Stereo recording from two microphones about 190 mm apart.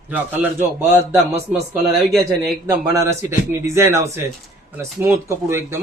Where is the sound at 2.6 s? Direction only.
15° right (ahead or behind).